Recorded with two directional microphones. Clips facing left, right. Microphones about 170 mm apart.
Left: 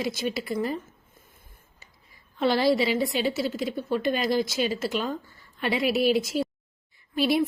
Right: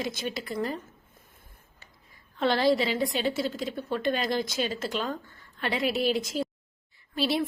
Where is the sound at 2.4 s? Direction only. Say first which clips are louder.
Left 2 dB; 10° left (ahead or behind).